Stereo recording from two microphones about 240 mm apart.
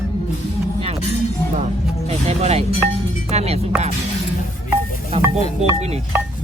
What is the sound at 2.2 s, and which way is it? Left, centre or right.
Chopping, right.